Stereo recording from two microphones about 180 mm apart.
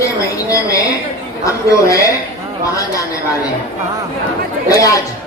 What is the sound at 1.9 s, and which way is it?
Speech, 20° left (ahead or behind).